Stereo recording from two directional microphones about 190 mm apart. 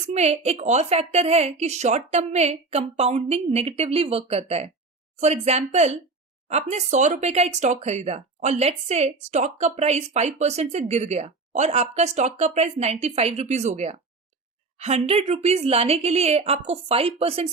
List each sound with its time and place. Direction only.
0.0 s speech: 35° right (ahead or behind)